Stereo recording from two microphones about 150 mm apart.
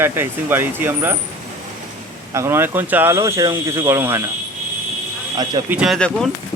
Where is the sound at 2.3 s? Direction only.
20° right (ahead or behind).